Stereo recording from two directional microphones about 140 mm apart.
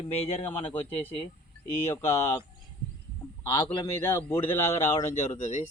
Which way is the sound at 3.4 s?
30° left (ahead or behind).